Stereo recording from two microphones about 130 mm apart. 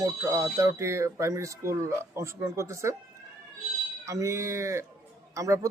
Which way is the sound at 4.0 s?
25° right (ahead or behind).